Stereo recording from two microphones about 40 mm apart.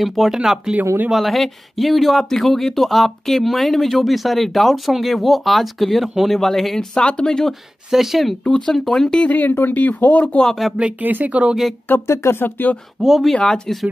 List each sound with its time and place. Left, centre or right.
0.0 s speech: centre
0.7 s speech: right
1.1 s speech: centre
7.9 s speech: centre
8.5 s speech: centre
9.3 s speech: left
10.4 s speech: centre
11.0 s speech: right
11.2 s speech: right
11.9 s speech: left
12.3 s speech: left
13.3 s speech: centre